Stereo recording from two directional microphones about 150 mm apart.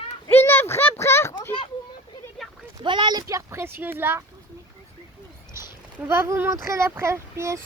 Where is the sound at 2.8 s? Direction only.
30° right (ahead or behind).